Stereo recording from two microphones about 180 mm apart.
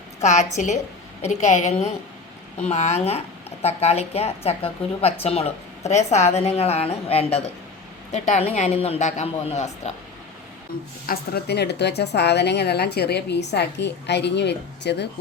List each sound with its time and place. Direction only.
0.2 s a woman's voice: 40° left (ahead or behind)
11.0 s speech: 60° left (ahead or behind)